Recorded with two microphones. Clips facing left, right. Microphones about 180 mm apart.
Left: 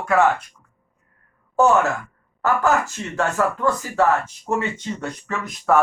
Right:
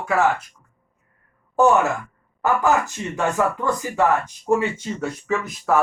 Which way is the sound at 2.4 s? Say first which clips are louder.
Even; 15° right (ahead or behind).